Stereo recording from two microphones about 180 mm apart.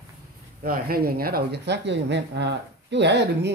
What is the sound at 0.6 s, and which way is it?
Speech, 55° right (ahead or behind).